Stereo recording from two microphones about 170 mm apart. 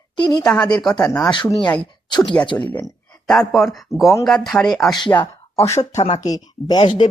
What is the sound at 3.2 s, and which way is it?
Speech, centre (ahead or behind).